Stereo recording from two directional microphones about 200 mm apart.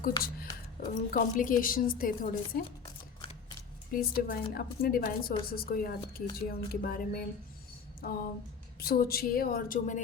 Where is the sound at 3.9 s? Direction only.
45° left (ahead or behind).